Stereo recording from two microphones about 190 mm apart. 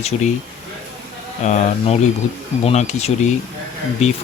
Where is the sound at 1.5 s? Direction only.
40° left (ahead or behind).